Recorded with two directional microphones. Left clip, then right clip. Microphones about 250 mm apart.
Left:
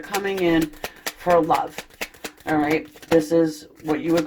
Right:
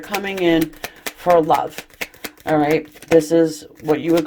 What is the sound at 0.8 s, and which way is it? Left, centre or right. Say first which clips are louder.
Speech: right 4 dB; right.